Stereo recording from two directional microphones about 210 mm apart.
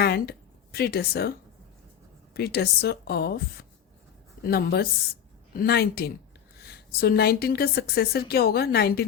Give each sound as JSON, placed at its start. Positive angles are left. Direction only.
{"t": 0.0, "sound": "speech", "side_deg": 50}
{"t": 2.3, "sound": "a woman's voice", "side_deg": 50}